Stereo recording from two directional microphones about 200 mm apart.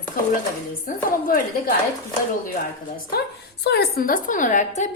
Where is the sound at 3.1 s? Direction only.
50° left (ahead or behind).